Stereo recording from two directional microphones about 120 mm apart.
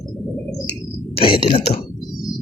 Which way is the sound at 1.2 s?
50° left (ahead or behind).